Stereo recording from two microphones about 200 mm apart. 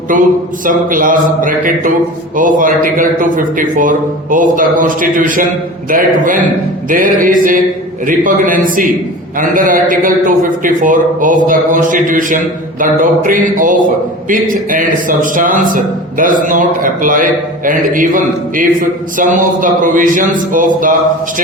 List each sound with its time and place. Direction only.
0.1 s a man's voice: 40° right (ahead or behind)
6.9 s a man's voice: 45° right (ahead or behind)